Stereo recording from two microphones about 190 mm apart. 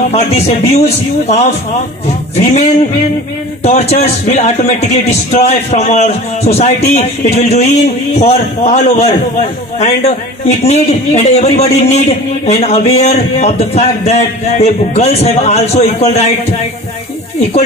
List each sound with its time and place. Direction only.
0.1 s speech: 35° left (ahead or behind)
2.3 s speech: 35° left (ahead or behind)
3.6 s speech: 35° left (ahead or behind)
10.6 s speech: 35° left (ahead or behind)